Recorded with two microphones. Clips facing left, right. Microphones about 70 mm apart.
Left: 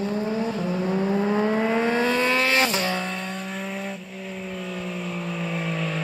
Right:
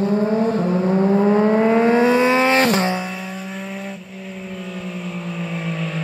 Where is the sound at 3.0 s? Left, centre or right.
Centre.